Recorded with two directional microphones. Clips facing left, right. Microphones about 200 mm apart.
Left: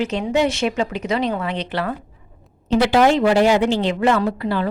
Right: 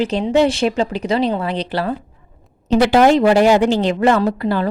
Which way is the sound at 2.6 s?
45° right (ahead or behind).